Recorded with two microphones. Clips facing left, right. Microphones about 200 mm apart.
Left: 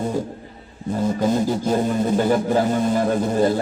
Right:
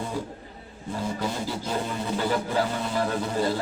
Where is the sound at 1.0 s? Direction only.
45° left (ahead or behind).